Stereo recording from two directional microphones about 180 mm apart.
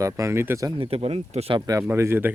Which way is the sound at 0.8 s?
30° right (ahead or behind).